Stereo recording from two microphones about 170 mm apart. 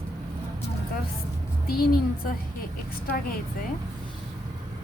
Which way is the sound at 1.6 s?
60° left (ahead or behind).